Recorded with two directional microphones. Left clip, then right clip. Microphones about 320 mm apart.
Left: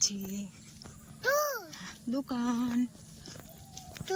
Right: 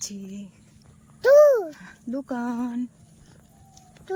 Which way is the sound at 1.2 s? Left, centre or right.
Right.